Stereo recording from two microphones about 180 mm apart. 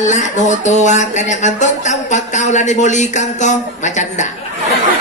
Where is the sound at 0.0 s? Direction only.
40° left (ahead or behind).